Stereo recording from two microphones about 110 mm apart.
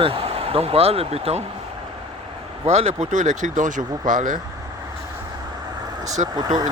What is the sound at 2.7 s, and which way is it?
Speech, 85° right.